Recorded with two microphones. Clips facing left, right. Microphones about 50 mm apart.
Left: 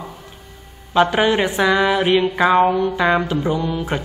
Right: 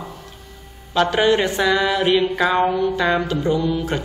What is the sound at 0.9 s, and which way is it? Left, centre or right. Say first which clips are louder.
Speech: left 1 dB; centre.